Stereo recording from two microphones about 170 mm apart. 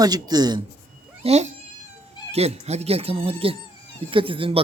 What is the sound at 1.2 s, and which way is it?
A man's voice, 40° right (ahead or behind).